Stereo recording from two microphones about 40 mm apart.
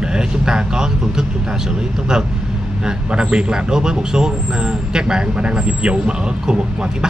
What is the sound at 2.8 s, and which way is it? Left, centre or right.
Speech, right.